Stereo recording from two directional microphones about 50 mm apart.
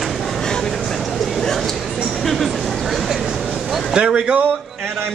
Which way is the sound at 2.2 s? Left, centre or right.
Centre.